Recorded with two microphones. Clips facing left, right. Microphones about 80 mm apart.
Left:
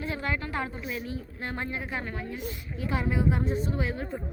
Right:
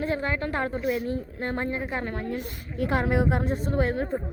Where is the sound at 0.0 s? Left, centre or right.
Right.